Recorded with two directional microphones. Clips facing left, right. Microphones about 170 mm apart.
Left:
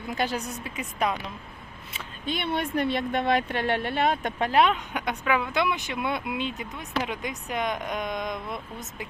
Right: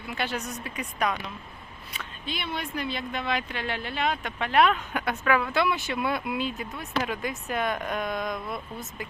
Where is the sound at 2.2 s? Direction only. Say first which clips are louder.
Left 5 dB; 50° left (ahead or behind).